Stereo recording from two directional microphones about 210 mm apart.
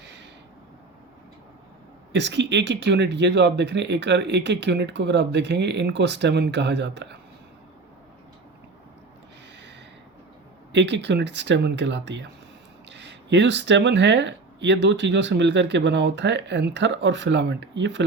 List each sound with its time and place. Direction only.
0.0 s a sound: 55° right (ahead or behind)
2.1 s speech: 55° right (ahead or behind)
10.7 s speech: 55° right (ahead or behind)